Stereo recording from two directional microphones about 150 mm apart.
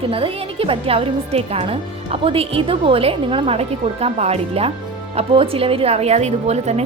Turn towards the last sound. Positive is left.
turn(degrees=-45)  # may be behind; listen again after turning